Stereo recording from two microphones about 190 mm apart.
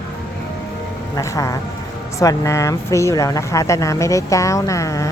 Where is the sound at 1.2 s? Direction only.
15° left (ahead or behind).